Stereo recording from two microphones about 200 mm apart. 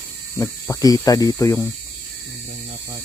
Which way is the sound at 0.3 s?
15° left (ahead or behind).